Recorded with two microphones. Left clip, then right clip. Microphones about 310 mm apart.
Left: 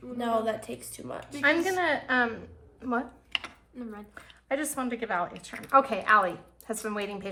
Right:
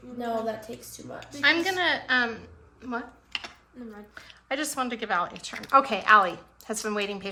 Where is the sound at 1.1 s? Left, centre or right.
Centre.